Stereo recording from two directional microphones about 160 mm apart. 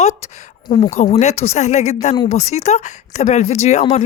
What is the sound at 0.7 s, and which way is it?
Speech, 45° left (ahead or behind).